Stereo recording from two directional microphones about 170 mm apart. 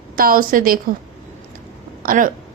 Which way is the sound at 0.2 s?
55° right (ahead or behind).